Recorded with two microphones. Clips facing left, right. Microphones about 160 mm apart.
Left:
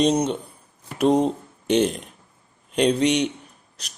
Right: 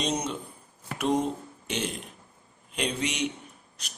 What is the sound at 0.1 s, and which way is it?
Speech, 35° left (ahead or behind).